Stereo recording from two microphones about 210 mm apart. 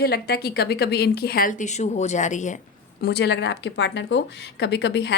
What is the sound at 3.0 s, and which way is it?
A woman's voice, 50° left (ahead or behind).